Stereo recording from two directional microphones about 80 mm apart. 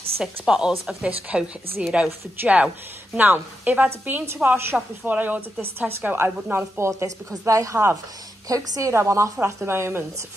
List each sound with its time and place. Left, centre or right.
0.2 s a woman's voice: centre; by 10.0 s right